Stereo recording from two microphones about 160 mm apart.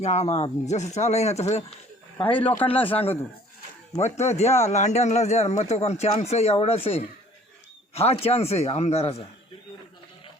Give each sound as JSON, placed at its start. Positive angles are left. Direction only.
{"t": 0.0, "sound": "speech", "side_deg": 45}
{"t": 2.1, "sound": "speech", "side_deg": 10}
{"t": 2.6, "sound": "speech", "side_deg": 35}
{"t": 4.2, "sound": "speech", "side_deg": 45}